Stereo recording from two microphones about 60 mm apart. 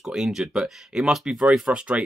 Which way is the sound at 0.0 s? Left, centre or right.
Centre.